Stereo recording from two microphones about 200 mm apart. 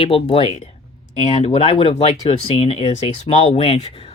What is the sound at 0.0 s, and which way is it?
Speech, 25° left (ahead or behind).